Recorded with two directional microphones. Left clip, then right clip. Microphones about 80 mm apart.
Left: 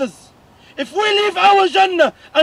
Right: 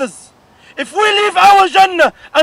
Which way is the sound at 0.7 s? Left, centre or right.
Right.